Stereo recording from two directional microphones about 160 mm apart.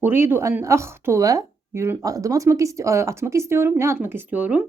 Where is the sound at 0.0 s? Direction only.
15° right (ahead or behind).